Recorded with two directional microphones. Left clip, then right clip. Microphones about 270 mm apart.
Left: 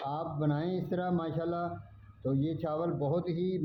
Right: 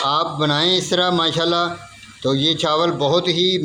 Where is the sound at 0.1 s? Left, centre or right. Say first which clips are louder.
Right 16 dB; right.